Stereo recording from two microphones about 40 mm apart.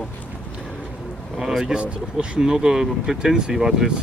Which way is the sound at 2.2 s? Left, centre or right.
Right.